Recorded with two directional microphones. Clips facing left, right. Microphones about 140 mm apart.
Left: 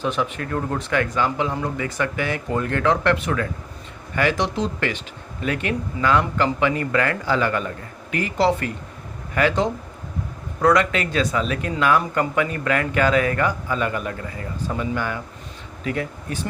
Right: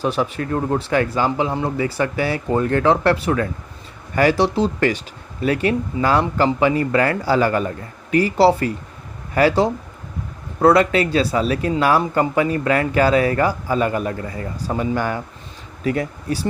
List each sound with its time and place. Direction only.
0.0 s speech: 35° right (ahead or behind)